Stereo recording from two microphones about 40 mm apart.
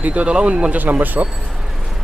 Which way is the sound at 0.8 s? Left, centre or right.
Right.